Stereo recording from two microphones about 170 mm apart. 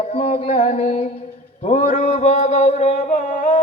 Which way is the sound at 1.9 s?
40° left (ahead or behind).